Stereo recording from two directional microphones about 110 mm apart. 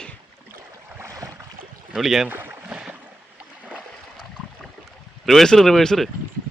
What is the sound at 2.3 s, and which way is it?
Rowboat, 20° right (ahead or behind).